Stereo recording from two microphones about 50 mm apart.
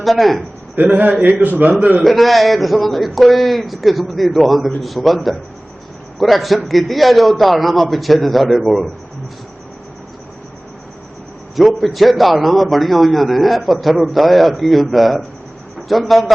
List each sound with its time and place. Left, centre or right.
0.0 s a man's voice: centre
0.8 s a man's voice: right
2.0 s a man's voice: centre
11.5 s a man's voice: centre